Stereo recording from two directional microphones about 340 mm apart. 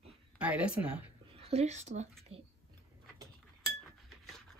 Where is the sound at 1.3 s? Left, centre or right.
Centre.